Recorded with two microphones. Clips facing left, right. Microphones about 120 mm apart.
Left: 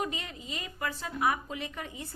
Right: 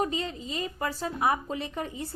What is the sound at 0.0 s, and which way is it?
A woman's voice, 30° right (ahead or behind).